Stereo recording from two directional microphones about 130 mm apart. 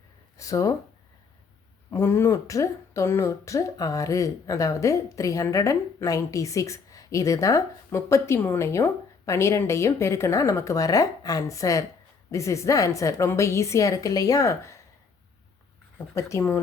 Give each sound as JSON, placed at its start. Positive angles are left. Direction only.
{"t": 0.3, "sound": "a sound", "side_deg": 25}
{"t": 1.9, "sound": "speech", "side_deg": 15}
{"t": 16.1, "sound": "speech", "side_deg": 20}